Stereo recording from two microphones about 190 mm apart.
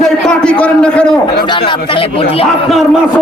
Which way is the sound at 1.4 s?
25° left (ahead or behind).